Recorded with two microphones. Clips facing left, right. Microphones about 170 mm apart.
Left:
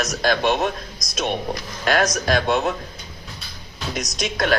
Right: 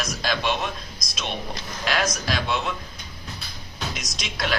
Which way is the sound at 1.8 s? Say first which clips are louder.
Left 6 dB; 50° left (ahead or behind).